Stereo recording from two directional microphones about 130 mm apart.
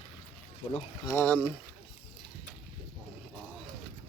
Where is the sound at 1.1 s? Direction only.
15° left (ahead or behind).